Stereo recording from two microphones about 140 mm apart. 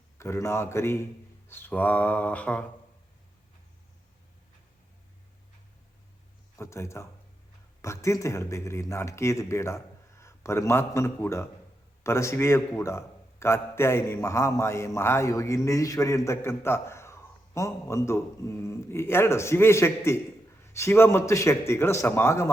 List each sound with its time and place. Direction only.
0.2 s a man's voice: 20° left (ahead or behind)
6.6 s a man's voice: 20° left (ahead or behind)